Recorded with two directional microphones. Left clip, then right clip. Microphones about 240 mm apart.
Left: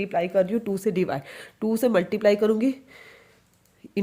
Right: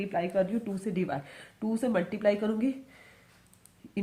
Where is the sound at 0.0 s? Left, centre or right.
Left.